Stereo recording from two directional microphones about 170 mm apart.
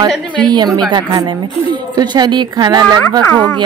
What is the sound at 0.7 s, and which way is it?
Speech, 25° right (ahead or behind).